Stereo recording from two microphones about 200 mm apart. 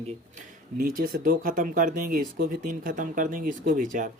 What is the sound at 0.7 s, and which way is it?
Speech, 45° right (ahead or behind).